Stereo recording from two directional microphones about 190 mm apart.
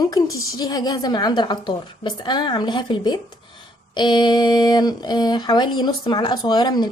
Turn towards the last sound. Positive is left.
turn(degrees=20)  # may be behind; listen again after turning